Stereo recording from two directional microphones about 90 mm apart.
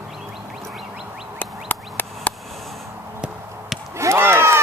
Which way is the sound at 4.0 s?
30° right (ahead or behind).